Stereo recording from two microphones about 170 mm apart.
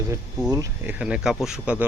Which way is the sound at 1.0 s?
5° right (ahead or behind).